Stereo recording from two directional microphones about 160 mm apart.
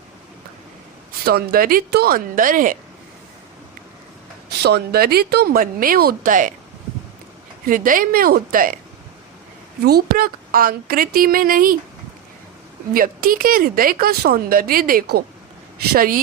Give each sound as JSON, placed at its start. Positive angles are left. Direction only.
{"t": 1.2, "sound": "speech", "side_deg": -75}
{"t": 4.6, "sound": "speech", "side_deg": -80}
{"t": 7.6, "sound": "speech", "side_deg": -60}
{"t": 9.8, "sound": "speech", "side_deg": -70}
{"t": 12.9, "sound": "speech", "side_deg": -65}